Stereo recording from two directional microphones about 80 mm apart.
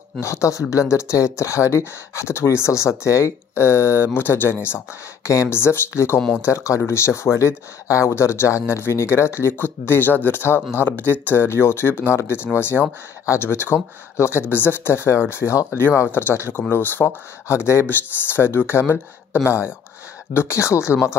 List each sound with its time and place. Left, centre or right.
0.2 s speech: left